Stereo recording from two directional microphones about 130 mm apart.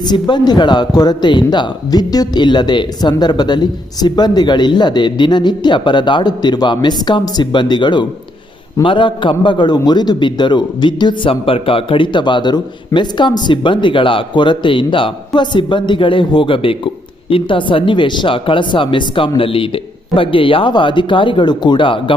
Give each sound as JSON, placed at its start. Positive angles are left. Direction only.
{"t": 0.0, "sound": "a man's voice", "side_deg": 35}